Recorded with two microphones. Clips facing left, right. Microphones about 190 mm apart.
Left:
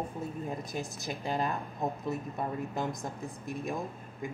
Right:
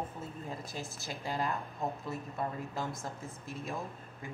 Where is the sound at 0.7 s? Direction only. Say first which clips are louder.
Left 5 dB; 15° left (ahead or behind).